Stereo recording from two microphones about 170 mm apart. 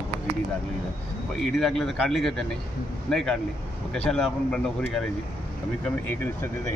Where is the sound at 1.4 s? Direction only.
Centre (ahead or behind).